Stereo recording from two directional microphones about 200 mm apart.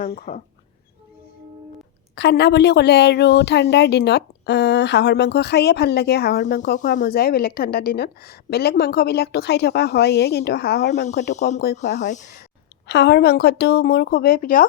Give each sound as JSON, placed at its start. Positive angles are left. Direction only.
{"t": 0.0, "sound": "a woman's voice", "side_deg": 45}
{"t": 2.1, "sound": "speech", "side_deg": 55}
{"t": 6.4, "sound": "a woman's voice", "side_deg": 40}
{"t": 11.0, "sound": "speech", "side_deg": 35}
{"t": 12.9, "sound": "a woman's voice", "side_deg": 55}